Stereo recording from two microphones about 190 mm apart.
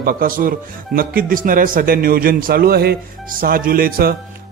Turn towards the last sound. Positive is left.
turn(degrees=-50)  # may be behind; listen again after turning